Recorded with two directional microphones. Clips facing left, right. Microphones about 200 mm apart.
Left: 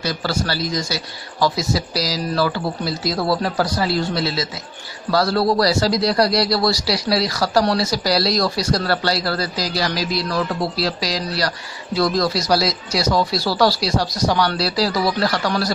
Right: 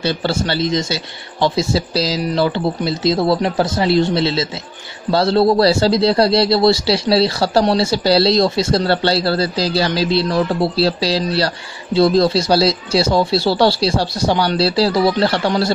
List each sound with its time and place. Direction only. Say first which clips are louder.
0.0 s a man's voice: right 4 dB; 25° right (ahead or behind)